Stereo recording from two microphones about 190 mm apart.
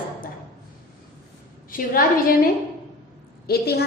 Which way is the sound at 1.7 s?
50° left (ahead or behind).